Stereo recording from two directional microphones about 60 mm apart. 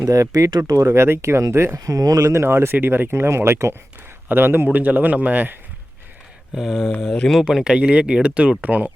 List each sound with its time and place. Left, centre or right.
0.0 s speech: right
0.9 s speech: right
1.8 s speech: right
4.3 s a man's voice: right
6.5 s speech: centre; by 8.9 s right